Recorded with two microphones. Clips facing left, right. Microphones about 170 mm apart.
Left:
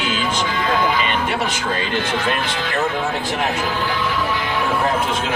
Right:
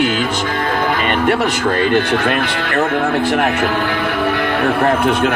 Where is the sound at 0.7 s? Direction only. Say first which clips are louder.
Right 2 dB; 55° right (ahead or behind).